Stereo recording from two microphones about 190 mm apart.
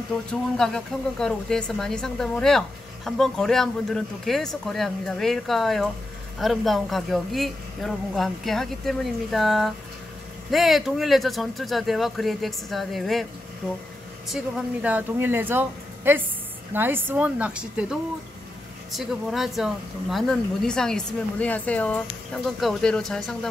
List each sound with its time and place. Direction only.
0.3 s speech: 5° left (ahead or behind)
14.3 s a woman's voice: 5° right (ahead or behind)